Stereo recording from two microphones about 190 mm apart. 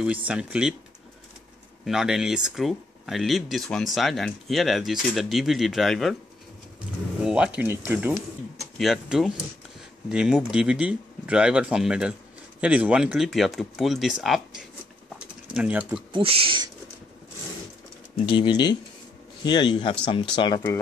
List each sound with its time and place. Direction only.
0.3 s speech: 5° right (ahead or behind)
1.9 s speech: 5° right (ahead or behind)
7.2 s speech: 5° right (ahead or behind)
16.1 s speech: 30° right (ahead or behind)
18.2 s speech: 25° left (ahead or behind)